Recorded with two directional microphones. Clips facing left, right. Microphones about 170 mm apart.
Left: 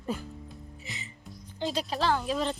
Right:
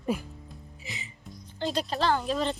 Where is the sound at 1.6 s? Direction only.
Centre (ahead or behind).